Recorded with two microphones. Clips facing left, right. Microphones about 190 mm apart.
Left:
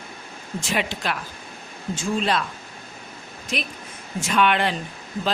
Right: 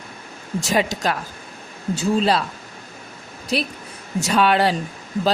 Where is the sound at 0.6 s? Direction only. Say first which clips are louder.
Right 6 dB; 40° right (ahead or behind).